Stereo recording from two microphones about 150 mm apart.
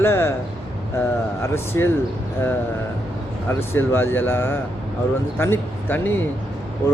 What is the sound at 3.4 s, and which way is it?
Speech, 15° left (ahead or behind).